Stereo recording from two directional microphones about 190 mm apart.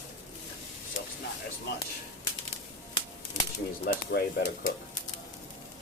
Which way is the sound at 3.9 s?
55° left (ahead or behind).